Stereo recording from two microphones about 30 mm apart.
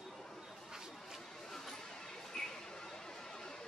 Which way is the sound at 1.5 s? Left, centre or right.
Centre.